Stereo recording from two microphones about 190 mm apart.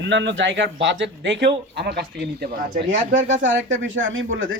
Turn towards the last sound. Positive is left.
turn(degrees=-90)